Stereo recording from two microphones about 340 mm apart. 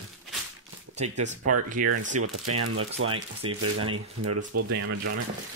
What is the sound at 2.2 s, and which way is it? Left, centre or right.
Speech, right.